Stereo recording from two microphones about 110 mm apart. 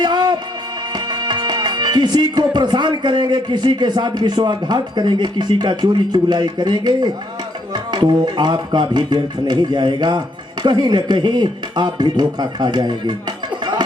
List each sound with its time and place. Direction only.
0.0 s music: 40° right (ahead or behind)
7.7 s speech: 40° right (ahead or behind)